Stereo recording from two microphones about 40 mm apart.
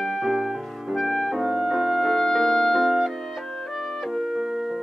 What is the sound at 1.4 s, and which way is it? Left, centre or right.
Music, centre.